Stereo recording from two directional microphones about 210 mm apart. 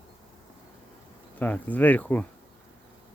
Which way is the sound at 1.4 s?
5° left (ahead or behind).